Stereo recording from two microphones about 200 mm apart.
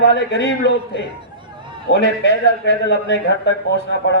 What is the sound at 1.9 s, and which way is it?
A man's voice, 60° left (ahead or behind).